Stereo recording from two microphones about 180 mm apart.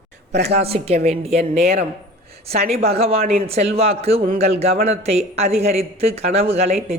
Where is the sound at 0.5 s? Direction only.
35° right (ahead or behind).